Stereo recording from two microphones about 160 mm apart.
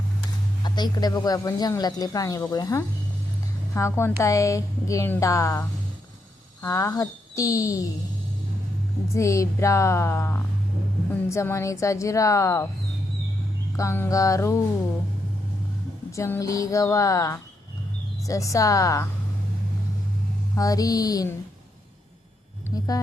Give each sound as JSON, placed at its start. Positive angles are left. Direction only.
{"t": 0.6, "sound": "speech", "side_deg": 25}
{"t": 9.1, "sound": "speech", "side_deg": 20}
{"t": 13.7, "sound": "speech", "side_deg": 15}
{"t": 16.1, "sound": "speech", "side_deg": 15}
{"t": 20.6, "sound": "speech", "side_deg": 20}